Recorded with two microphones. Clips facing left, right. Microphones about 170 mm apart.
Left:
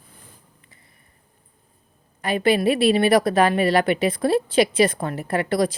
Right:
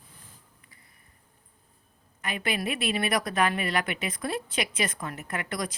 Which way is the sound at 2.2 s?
35° left (ahead or behind).